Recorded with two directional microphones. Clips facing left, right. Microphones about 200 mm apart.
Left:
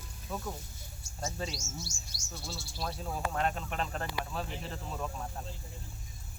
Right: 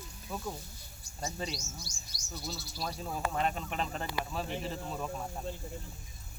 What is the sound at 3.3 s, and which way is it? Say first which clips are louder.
A man's voice: even; centre (ahead or behind).